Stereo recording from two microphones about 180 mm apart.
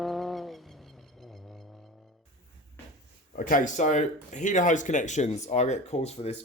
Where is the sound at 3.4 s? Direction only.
50° left (ahead or behind).